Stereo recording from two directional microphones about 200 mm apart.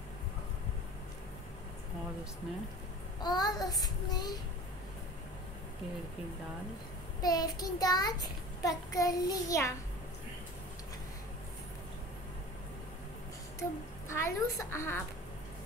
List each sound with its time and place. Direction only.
3.2 s child singing: 20° left (ahead or behind)
7.2 s a child's voice: 20° left (ahead or behind)
13.6 s a child's voice: 15° left (ahead or behind)